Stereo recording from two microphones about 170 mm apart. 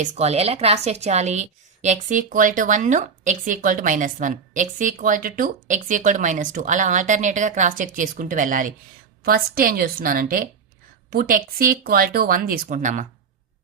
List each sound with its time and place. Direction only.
0.0 s a woman's voice: 40° right (ahead or behind)